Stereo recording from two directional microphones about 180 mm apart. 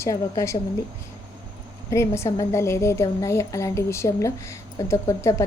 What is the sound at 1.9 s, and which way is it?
A woman's voice, 15° left (ahead or behind).